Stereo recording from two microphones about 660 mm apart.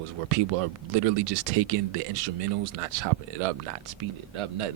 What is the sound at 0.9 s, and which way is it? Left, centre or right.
Speech, right.